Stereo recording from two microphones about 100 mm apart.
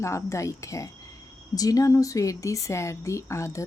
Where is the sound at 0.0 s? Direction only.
30° left (ahead or behind).